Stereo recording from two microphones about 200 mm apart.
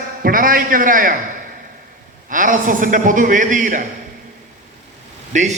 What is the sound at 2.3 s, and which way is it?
A man's voice, 40° right (ahead or behind).